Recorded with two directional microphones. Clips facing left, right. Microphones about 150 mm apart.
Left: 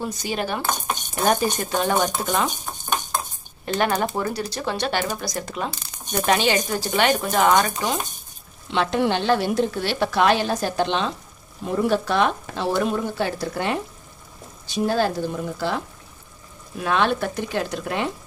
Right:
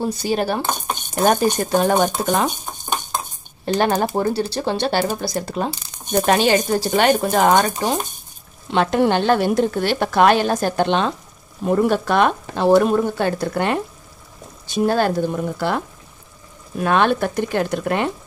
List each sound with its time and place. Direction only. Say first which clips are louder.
0.0 s speech: right 6 dB; 35° right (ahead or behind)
2.6 s stir: right 1 dB; 20° right (ahead or behind)
3.6 s a woman's voice: right 4 dB; 35° right (ahead or behind); by 15.8 s 55° right (ahead or behind)
16.8 s speech: right 4 dB; 55° right (ahead or behind)